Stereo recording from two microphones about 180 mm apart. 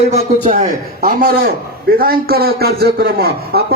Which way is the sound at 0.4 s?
40° right (ahead or behind).